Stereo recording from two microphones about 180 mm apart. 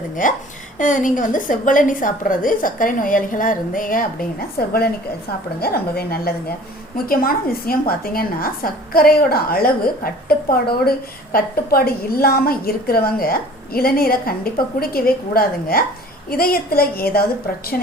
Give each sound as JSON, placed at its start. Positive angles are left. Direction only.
{"t": 0.2, "sound": "a woman's voice", "side_deg": 45}